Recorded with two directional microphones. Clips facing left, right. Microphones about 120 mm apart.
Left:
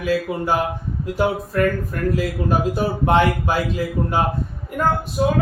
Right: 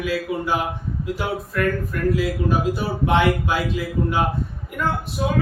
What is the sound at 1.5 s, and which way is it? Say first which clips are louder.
Speech: left 1 dB; 40° left (ahead or behind).